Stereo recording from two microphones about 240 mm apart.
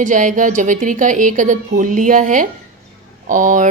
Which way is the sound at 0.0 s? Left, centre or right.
Right.